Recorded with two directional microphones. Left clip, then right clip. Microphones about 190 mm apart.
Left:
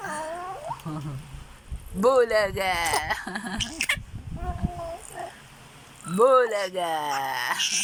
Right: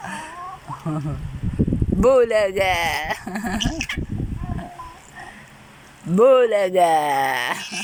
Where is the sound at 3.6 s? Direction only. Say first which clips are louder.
Left 3 dB; 20° left (ahead or behind).